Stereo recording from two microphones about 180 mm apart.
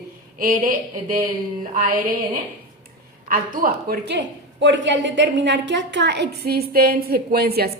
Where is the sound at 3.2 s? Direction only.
50° right (ahead or behind).